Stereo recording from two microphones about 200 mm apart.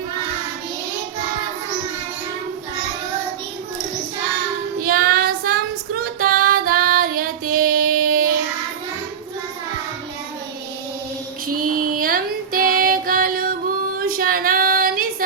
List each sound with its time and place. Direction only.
4.8 s child singing: 45° right (ahead or behind)
6.0 s female singing: 45° right (ahead or behind)
11.6 s female singing: 45° right (ahead or behind)